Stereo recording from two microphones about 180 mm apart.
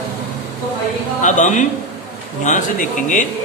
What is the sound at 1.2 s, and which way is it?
Speech, 45° left (ahead or behind).